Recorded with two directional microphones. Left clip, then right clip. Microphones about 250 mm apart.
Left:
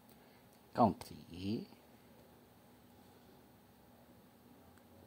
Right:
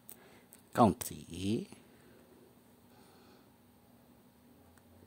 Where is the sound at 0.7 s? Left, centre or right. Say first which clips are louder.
Right 4 dB; right.